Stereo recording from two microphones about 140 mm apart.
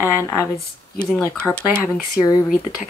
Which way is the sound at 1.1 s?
5° left (ahead or behind).